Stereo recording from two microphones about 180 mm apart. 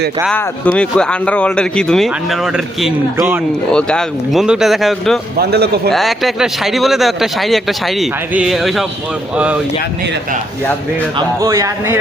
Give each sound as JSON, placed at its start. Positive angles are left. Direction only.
{"t": 0.3, "sound": "speech", "side_deg": 10}
{"t": 3.7, "sound": "speech", "side_deg": 5}
{"t": 5.4, "sound": "a man's voice", "side_deg": -65}
{"t": 5.9, "sound": "speech", "side_deg": 0}
{"t": 11.4, "sound": "speech", "side_deg": -15}